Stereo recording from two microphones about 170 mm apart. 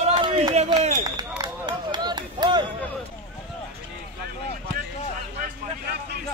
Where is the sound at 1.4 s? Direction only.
25° right (ahead or behind).